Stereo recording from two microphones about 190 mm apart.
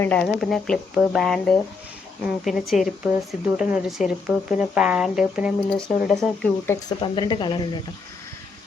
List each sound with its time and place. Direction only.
0.0 s speech: 5° left (ahead or behind)
6.7 s speech: 20° left (ahead or behind)